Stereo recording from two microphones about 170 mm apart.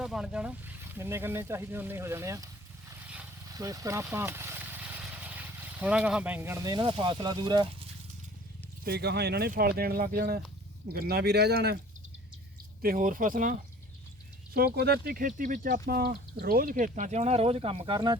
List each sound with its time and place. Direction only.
0.0 s speech: 5° right (ahead or behind)
2.9 s vehicle: 5° right (ahead or behind)
3.5 s speech: 20° right (ahead or behind)
8.8 s speech: 70° right (ahead or behind)
12.8 s speech: 55° right (ahead or behind)
14.5 s speech: 70° right (ahead or behind); by 18.2 s 25° right (ahead or behind)